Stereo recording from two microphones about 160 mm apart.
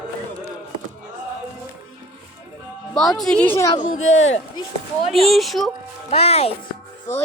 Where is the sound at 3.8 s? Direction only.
45° left (ahead or behind).